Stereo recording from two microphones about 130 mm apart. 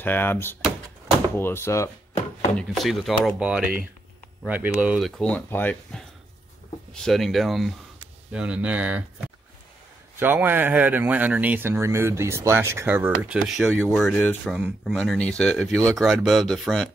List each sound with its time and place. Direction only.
0.0 s speech: 15° left (ahead or behind)
2.5 s speech: centre (ahead or behind)
4.9 s speech: 5° left (ahead or behind)
6.9 s speech: 5° left (ahead or behind)
10.1 s speech: 15° right (ahead or behind); by 14.5 s 10° left (ahead or behind)
14.5 s speech: 5° right (ahead or behind)
15.0 s speech: 5° left (ahead or behind)